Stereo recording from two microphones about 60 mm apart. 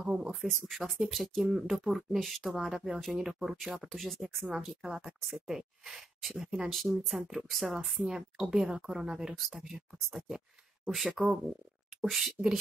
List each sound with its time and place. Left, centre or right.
0.0 s speech: centre
0.4 s speech: centre
4.5 s speech: centre